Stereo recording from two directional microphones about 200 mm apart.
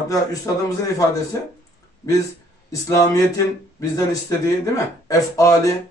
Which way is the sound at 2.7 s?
15° left (ahead or behind).